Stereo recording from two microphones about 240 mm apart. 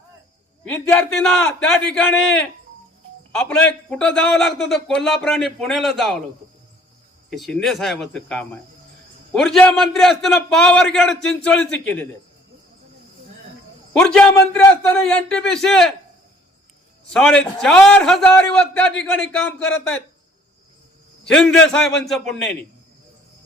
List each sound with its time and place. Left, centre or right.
0.7 s a man's voice: centre
7.3 s a man's voice: centre
13.9 s a man's voice: centre
17.1 s a man's voice: centre
21.2 s a man's voice: centre